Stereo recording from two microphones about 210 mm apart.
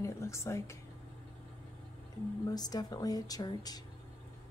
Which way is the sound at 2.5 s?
20° left (ahead or behind).